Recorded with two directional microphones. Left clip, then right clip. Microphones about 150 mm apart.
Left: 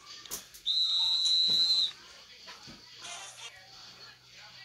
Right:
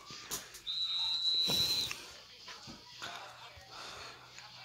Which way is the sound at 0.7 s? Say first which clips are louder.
Left 9 dB; 40° left (ahead or behind).